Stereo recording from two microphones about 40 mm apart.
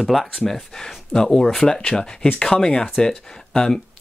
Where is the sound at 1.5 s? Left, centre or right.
Centre.